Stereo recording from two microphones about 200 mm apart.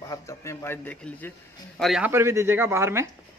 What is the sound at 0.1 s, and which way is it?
A man's voice, 15° left (ahead or behind).